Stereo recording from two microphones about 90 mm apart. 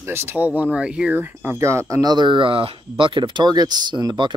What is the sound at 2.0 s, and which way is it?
Speech, 55° right (ahead or behind).